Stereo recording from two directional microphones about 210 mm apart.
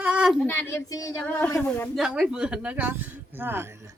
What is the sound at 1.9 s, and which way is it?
Speech, centre (ahead or behind).